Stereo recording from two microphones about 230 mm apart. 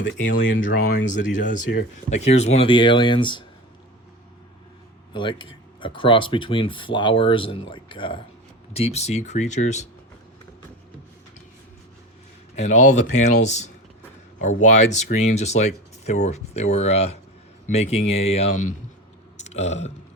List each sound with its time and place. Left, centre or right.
0.0 s speech: left
1.4 s speech: left
5.1 s speech: left
12.5 s speech: left